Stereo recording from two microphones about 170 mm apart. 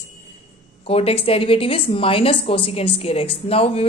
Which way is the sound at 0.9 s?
35° left (ahead or behind).